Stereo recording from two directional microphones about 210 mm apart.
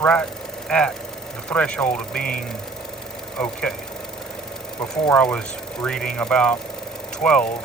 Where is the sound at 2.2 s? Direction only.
45° left (ahead or behind).